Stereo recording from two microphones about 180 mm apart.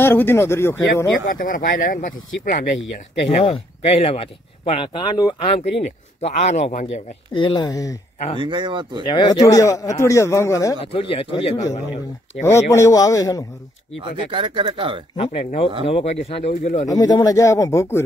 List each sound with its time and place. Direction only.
0.0 s speech: 10° left (ahead or behind)
1.2 s speech: 50° left (ahead or behind)
3.3 s speech: 35° left (ahead or behind)
5.6 s speech: 35° left (ahead or behind)
7.3 s a man's voice: 25° left (ahead or behind)
8.4 s speech: 25° right (ahead or behind)
9.0 s speech: 25° left (ahead or behind)
10.8 s speech: 30° left (ahead or behind)
11.7 s speech: 40° left (ahead or behind)
12.4 s a man's voice: 15° left (ahead or behind)
14.3 s speech: 25° right (ahead or behind)
15.1 s speech: 35° left (ahead or behind)
16.8 s speech: 20° left (ahead or behind)